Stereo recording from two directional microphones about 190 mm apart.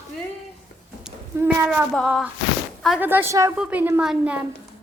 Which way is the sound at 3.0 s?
10° right (ahead or behind).